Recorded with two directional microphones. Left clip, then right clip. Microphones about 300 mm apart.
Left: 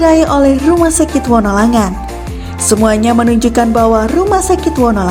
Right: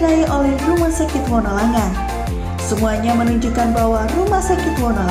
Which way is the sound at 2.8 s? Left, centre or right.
Left.